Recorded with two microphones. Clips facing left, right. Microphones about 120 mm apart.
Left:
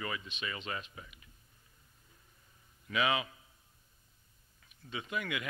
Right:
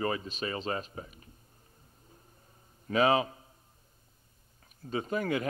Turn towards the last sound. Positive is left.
turn(degrees=-40)  # may be behind; listen again after turning